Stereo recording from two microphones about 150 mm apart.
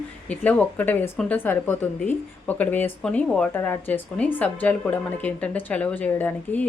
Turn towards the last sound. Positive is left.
turn(degrees=10)  # may be behind; listen again after turning